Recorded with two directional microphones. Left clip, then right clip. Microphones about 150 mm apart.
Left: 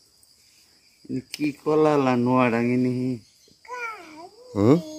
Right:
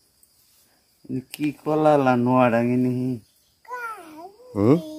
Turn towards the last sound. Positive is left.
turn(degrees=0)  # may be behind; listen again after turning